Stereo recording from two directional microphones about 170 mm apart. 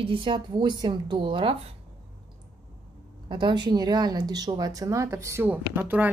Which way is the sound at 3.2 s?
25° right (ahead or behind).